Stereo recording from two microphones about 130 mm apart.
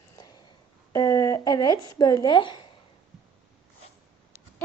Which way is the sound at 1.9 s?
30° left (ahead or behind).